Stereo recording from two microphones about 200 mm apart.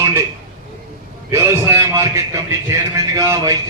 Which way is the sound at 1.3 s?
15° right (ahead or behind).